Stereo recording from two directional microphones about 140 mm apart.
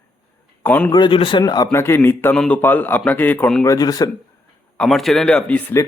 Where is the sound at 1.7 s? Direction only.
15° left (ahead or behind).